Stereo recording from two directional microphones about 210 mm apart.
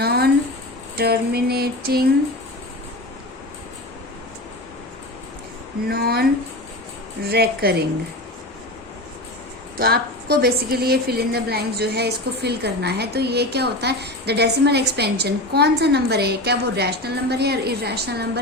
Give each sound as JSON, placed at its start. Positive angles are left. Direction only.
{"t": 0.0, "sound": "a sound", "side_deg": -50}
{"t": 0.9, "sound": "a woman's voice", "side_deg": -50}
{"t": 5.9, "sound": "a woman's voice", "side_deg": -45}
{"t": 7.3, "sound": "a woman's voice", "side_deg": -50}
{"t": 9.7, "sound": "a woman's voice", "side_deg": -45}